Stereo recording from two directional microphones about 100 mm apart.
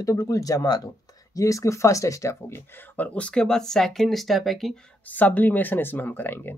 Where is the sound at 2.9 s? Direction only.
15° left (ahead or behind).